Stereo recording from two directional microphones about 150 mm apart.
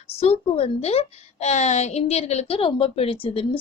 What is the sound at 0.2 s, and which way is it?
A woman's voice, 40° left (ahead or behind).